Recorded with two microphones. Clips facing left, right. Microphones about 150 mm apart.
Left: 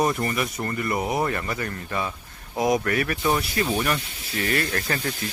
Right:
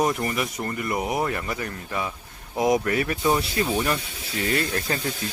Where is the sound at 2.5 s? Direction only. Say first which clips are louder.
Right 1 dB; 20° right (ahead or behind).